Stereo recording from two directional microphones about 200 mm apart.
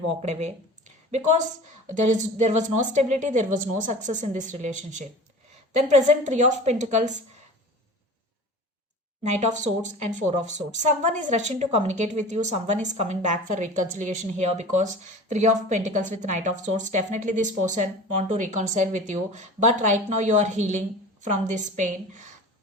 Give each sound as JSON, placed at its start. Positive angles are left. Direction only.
{"t": 0.1, "sound": "a woman's voice", "side_deg": -35}
{"t": 9.2, "sound": "a woman's voice", "side_deg": -35}